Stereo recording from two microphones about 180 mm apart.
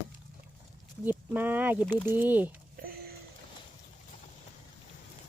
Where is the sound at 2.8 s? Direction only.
60° right (ahead or behind).